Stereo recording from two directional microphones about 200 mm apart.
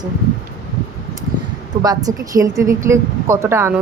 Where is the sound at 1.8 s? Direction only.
20° right (ahead or behind).